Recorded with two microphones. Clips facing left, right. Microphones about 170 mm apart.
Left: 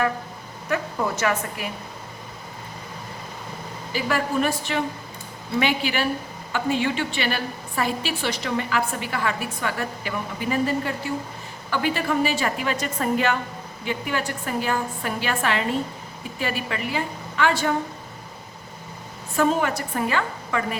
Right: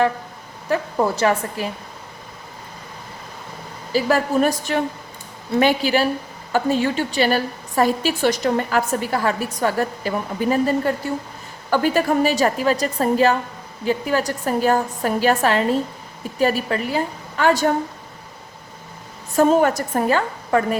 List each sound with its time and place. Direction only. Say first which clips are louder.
0.7 s a woman's voice: right 5 dB; 30° right (ahead or behind)
3.9 s a woman's voice: right 6 dB; 40° right (ahead or behind)
19.4 s a woman's voice: right 6 dB; 45° right (ahead or behind)